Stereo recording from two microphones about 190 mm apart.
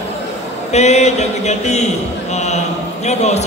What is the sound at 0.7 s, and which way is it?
Speech, 35° left (ahead or behind).